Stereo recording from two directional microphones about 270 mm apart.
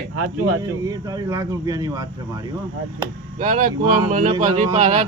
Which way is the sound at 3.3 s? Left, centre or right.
Right.